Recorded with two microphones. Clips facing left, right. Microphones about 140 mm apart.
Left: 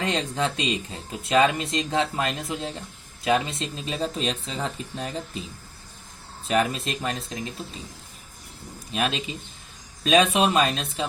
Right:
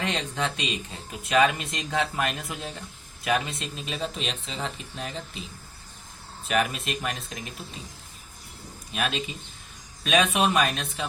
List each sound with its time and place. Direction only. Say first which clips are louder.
0.0 s speech: left 3 dB; 35° left (ahead or behind)
6.5 s speech: left 2 dB; 35° left (ahead or behind)
8.9 s speech: left 3 dB; 30° left (ahead or behind)